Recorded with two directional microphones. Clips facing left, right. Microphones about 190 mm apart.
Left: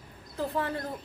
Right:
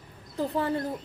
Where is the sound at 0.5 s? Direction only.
25° right (ahead or behind).